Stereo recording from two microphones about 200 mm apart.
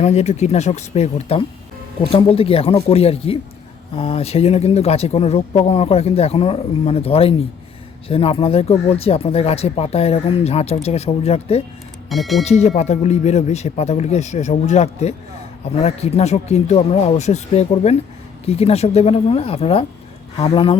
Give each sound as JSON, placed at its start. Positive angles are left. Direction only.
{"t": 0.0, "sound": "speech", "side_deg": 35}
{"t": 12.0, "sound": "speech", "side_deg": 0}
{"t": 12.5, "sound": "speech", "side_deg": 35}